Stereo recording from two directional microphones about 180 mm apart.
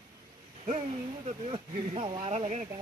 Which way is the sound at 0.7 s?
35° right (ahead or behind).